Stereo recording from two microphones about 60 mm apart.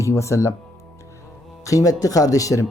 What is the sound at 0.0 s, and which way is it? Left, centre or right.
Speech, left.